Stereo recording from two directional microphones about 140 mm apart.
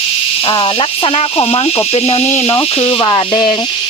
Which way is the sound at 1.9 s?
45° left (ahead or behind).